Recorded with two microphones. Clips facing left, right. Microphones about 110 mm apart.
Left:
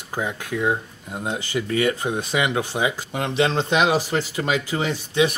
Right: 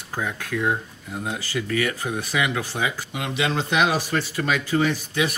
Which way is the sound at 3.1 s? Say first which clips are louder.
Left 5 dB; 40° left (ahead or behind).